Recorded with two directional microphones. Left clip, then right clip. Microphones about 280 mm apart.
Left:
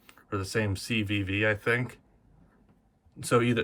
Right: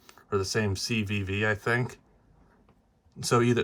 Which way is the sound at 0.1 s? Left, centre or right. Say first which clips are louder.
Right 3 dB; centre.